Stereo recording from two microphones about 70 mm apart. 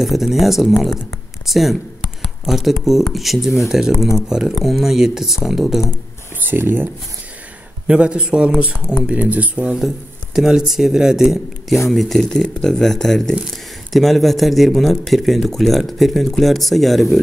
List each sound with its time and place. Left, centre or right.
0.0 s speech: centre
6.4 s speech: right
7.8 s speech: centre
9.8 s speech: centre